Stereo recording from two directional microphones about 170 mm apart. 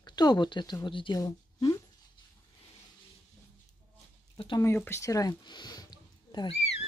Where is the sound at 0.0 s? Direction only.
25° left (ahead or behind).